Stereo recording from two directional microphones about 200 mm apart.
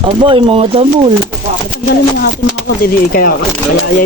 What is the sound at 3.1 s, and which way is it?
Speech, 45° left (ahead or behind).